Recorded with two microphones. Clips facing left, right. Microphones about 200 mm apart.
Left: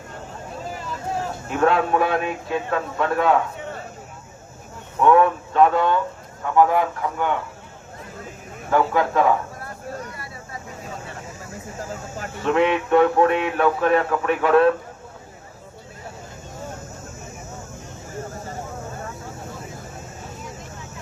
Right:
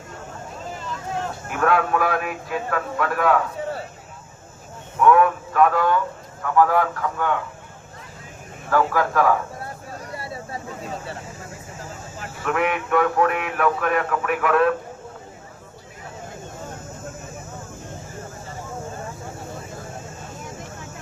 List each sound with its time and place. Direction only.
1.5 s speech: 25° left (ahead or behind)
3.6 s a sound: 35° right (ahead or behind)
4.9 s speech: 25° left (ahead or behind)
8.7 s speech: 20° left (ahead or behind)
10.0 s vehicle: 30° right (ahead or behind)
12.4 s speech: 25° left (ahead or behind)